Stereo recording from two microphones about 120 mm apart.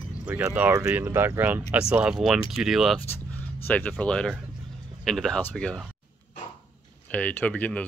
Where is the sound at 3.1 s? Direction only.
15° left (ahead or behind).